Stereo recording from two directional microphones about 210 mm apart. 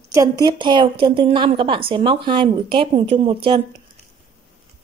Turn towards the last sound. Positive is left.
turn(degrees=-25)  # may be behind; listen again after turning